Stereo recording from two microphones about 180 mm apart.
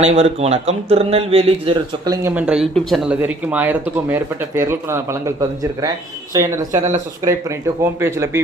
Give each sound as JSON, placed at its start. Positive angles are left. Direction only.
{"t": 0.0, "sound": "speech", "side_deg": -35}
{"t": 2.0, "sound": "speech", "side_deg": -10}
{"t": 6.7, "sound": "speech", "side_deg": -40}
{"t": 7.8, "sound": "speech", "side_deg": -15}